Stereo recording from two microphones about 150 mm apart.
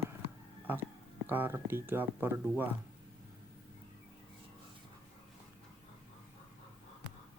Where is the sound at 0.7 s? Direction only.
15° right (ahead or behind).